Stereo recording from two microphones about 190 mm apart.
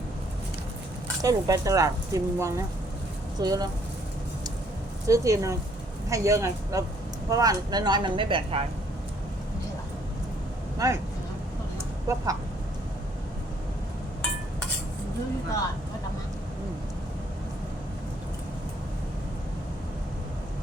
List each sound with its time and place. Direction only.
1.2 s speech: 15° right (ahead or behind)
5.0 s speech: 15° right (ahead or behind)
10.8 s speech: 15° right (ahead or behind)
12.0 s speech: 20° right (ahead or behind)